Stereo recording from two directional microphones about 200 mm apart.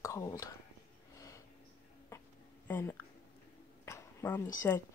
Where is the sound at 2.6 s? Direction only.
10° left (ahead or behind).